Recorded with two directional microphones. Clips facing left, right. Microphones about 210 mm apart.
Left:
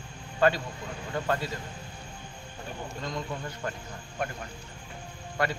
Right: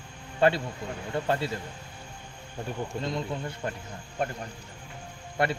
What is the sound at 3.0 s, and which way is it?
Speech, 25° right (ahead or behind).